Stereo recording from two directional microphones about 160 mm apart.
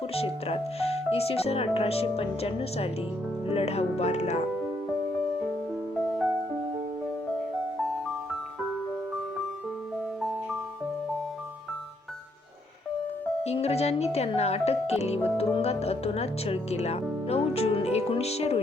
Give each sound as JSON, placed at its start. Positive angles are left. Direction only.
{"t": 0.1, "sound": "speech", "side_deg": 40}
{"t": 6.1, "sound": "music", "side_deg": 0}
{"t": 13.4, "sound": "speech", "side_deg": 40}